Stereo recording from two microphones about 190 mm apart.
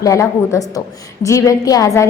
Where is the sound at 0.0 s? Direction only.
15° left (ahead or behind).